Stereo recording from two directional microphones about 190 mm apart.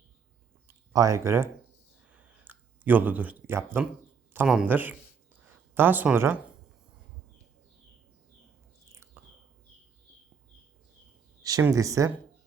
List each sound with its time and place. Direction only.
0.9 s speech: 15° right (ahead or behind)
2.1 s clicking: 10° right (ahead or behind)
4.4 s speech: 5° right (ahead or behind)
11.4 s speech: 20° right (ahead or behind)